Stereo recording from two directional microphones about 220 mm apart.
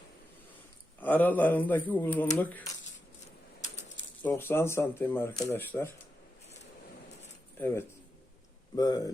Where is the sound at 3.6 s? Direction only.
30° left (ahead or behind).